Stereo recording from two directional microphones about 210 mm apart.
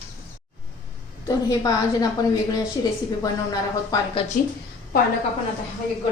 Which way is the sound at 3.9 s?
20° left (ahead or behind).